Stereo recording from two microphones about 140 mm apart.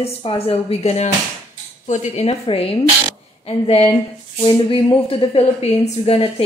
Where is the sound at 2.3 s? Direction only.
45° left (ahead or behind).